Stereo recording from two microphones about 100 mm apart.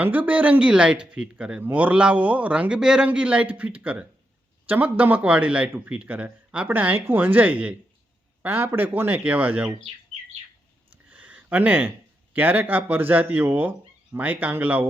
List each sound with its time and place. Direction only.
0.0 s speech: 15° right (ahead or behind)
11.1 s a sound: 15° right (ahead or behind)
12.3 s speech: 15° right (ahead or behind)